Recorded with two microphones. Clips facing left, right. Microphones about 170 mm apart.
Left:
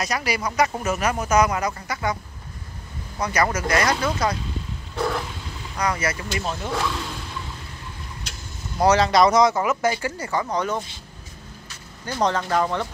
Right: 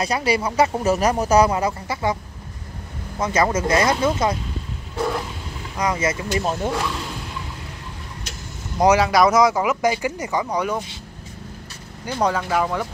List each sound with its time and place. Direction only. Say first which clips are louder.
0.0 s speech: right 4 dB; 30° right (ahead or behind)
3.2 s speech: right 3 dB; 25° right (ahead or behind)
5.8 s speech: right 3 dB; 20° right (ahead or behind)
6.4 s speech: right 6 dB; 45° right (ahead or behind)
8.7 s speech: right 1 dB; 10° right (ahead or behind)
12.1 s speech: right 1 dB; 10° right (ahead or behind)